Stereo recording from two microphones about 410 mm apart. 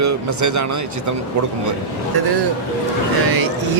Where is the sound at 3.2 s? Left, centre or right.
Right.